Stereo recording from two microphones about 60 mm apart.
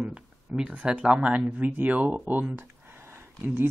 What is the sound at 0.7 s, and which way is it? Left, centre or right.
Speech, centre.